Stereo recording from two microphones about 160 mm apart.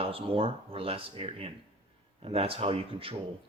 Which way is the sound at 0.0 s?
35° right (ahead or behind).